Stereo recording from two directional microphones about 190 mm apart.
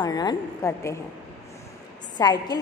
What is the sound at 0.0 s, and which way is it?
Speech, 20° left (ahead or behind).